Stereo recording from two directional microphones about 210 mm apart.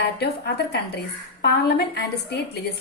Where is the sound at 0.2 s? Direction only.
50° left (ahead or behind).